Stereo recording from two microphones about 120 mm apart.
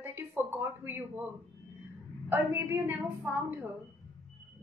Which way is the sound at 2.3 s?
20° right (ahead or behind).